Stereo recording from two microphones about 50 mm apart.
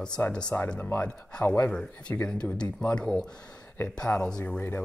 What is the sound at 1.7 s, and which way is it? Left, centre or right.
Speech, left.